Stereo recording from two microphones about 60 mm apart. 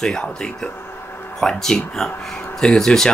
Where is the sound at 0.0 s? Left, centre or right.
Centre.